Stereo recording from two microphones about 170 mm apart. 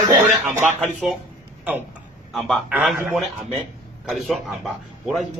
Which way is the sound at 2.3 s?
Centre (ahead or behind).